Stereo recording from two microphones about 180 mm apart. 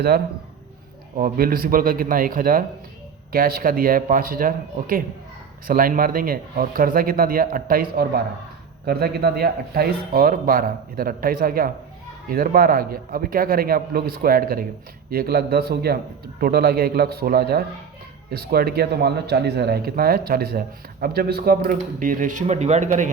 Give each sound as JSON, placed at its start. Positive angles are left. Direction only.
{"t": 1.1, "sound": "speech", "side_deg": -50}